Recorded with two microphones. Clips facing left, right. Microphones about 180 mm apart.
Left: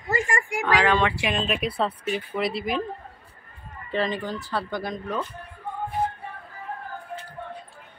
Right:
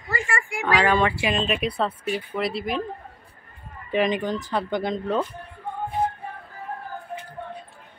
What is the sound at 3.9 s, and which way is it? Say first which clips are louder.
Speech: right 4 dB; 15° right (ahead or behind).